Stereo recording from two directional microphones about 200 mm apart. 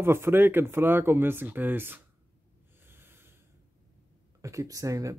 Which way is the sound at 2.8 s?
10° right (ahead or behind).